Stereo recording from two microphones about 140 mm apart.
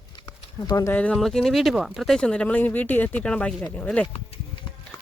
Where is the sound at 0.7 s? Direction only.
25° left (ahead or behind).